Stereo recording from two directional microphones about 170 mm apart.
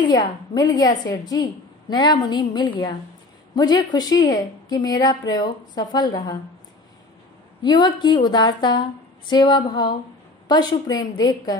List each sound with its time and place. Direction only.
0.1 s a woman's voice: 25° left (ahead or behind)
7.6 s a woman's voice: 25° left (ahead or behind)